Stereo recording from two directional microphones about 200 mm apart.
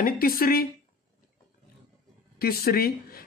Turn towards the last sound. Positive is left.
turn(degrees=50)  # may be behind; listen again after turning